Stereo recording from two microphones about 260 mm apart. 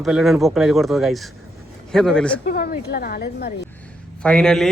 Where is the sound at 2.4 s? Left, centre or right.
Left.